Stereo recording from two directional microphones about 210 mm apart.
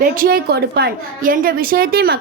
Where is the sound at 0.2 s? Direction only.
45° right (ahead or behind).